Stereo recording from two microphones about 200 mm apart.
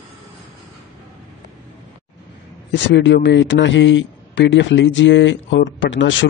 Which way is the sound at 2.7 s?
60° left (ahead or behind).